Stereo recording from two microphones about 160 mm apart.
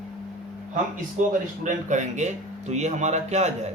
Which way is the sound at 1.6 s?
50° right (ahead or behind).